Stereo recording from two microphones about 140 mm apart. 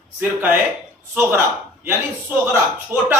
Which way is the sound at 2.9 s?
15° right (ahead or behind).